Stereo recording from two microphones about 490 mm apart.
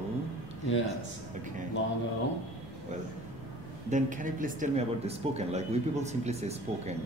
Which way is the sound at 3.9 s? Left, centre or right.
Centre.